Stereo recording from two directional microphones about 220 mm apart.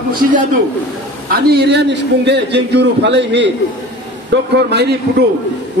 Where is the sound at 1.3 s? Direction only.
45° right (ahead or behind).